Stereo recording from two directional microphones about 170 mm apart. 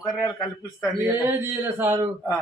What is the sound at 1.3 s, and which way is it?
Speech, 15° right (ahead or behind).